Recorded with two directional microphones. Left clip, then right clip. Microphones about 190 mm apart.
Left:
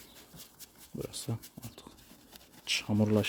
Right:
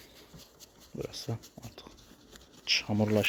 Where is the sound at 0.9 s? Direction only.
20° left (ahead or behind).